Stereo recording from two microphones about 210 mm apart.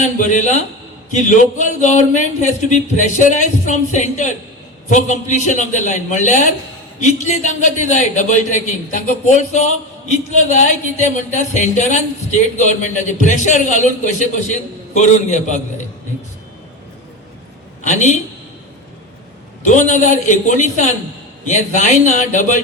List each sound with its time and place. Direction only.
0.0 s speech: 35° left (ahead or behind)
19.6 s speech: 35° left (ahead or behind)